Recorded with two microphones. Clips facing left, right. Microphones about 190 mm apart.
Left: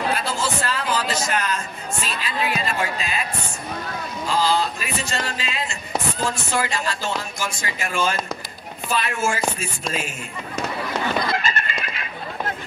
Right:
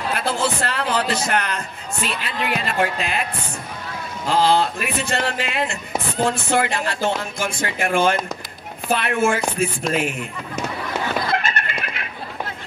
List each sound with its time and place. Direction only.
0.1 s a sound: 60° right (ahead or behind)
2.5 s speech: 60° right (ahead or behind)
4.3 s speech: 60° right (ahead or behind)
11.3 s fowl: 65° right (ahead or behind)